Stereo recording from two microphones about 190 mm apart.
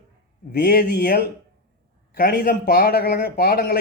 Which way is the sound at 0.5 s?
55° left (ahead or behind).